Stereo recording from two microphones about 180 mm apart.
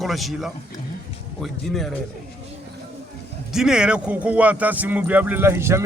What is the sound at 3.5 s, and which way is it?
Speech, 5° right (ahead or behind).